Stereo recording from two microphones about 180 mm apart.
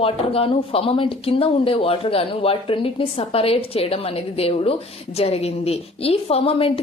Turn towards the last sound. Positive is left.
turn(degrees=30)  # may be behind; listen again after turning